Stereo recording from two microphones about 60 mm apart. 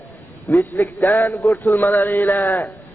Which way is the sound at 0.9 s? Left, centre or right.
Left.